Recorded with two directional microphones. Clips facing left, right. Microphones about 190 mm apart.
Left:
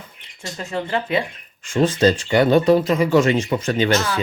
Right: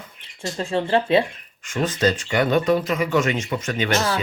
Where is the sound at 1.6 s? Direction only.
30° left (ahead or behind).